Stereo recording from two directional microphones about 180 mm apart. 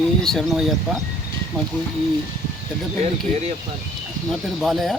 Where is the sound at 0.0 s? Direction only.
5° left (ahead or behind).